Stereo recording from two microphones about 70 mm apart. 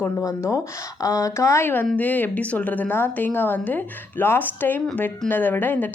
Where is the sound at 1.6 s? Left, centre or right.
Left.